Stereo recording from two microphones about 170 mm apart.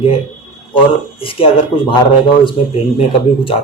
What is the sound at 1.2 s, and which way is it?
Speech, 30° left (ahead or behind).